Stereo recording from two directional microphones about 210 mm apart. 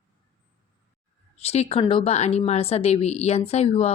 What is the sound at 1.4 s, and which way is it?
A woman's voice, 30° left (ahead or behind).